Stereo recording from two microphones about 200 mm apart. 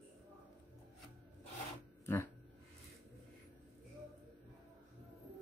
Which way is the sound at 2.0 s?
10° left (ahead or behind).